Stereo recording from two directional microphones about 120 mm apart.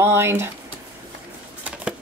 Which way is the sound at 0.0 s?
20° right (ahead or behind).